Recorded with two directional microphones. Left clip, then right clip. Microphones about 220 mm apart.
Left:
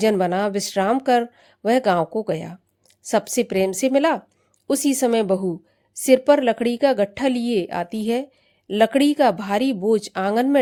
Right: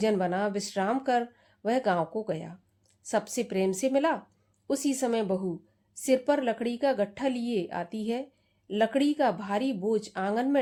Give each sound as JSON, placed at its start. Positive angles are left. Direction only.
{"t": 0.0, "sound": "a woman's voice", "side_deg": 40}